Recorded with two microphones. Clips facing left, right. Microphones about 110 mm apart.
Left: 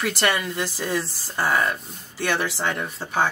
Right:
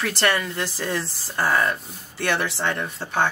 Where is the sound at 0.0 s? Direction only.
5° left (ahead or behind).